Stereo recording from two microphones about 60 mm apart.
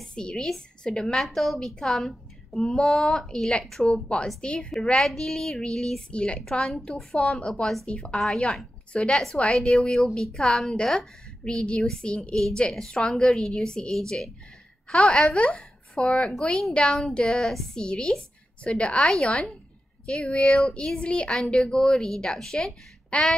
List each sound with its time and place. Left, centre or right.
0.0 s a woman's voice: centre
3.8 s a woman's voice: centre
15.3 s a woman's voice: centre
23.1 s a woman's voice: left